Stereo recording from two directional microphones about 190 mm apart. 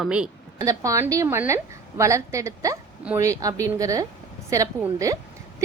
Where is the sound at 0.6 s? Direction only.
15° right (ahead or behind).